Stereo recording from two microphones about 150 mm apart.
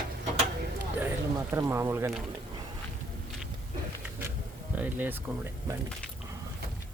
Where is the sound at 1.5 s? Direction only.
20° right (ahead or behind).